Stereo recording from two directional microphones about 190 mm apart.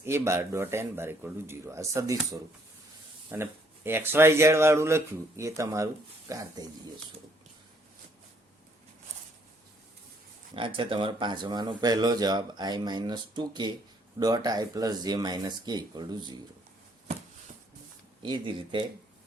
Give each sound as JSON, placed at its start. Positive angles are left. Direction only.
{"t": 0.0, "sound": "speech", "side_deg": -15}
{"t": 10.5, "sound": "speech", "side_deg": -30}
{"t": 18.2, "sound": "speech", "side_deg": -25}